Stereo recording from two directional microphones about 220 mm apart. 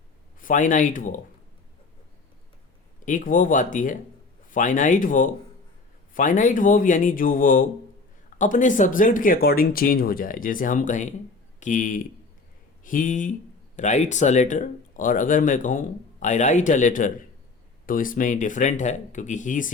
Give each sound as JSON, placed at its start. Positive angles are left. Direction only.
{"t": 0.3, "sound": "speech", "side_deg": 35}
{"t": 3.1, "sound": "speech", "side_deg": 35}